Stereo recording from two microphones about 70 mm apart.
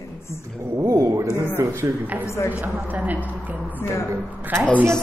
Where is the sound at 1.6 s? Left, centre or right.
Right.